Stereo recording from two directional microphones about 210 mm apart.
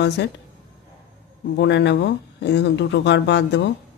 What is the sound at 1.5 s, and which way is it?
Speech, 55° left (ahead or behind).